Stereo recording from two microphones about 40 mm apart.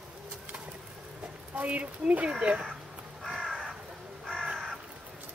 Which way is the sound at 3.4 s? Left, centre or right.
Centre.